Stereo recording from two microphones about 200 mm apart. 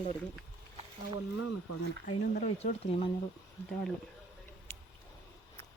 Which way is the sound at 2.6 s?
30° left (ahead or behind).